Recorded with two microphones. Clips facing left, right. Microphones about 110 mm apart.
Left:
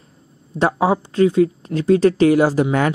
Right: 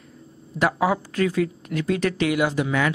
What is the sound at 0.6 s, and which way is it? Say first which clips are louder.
Speech: left 4 dB; 30° left (ahead or behind).